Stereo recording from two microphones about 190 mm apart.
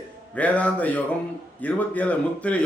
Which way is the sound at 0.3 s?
5° left (ahead or behind).